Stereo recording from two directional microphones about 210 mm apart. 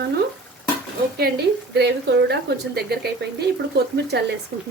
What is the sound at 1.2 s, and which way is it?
A woman's voice, 50° right (ahead or behind).